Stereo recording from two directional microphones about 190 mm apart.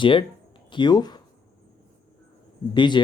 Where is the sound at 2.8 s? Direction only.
25° left (ahead or behind).